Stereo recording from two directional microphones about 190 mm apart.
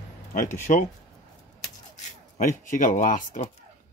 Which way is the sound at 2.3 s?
45° left (ahead or behind).